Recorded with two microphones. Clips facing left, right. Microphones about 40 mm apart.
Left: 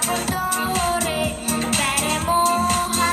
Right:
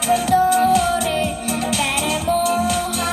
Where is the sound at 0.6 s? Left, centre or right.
Left.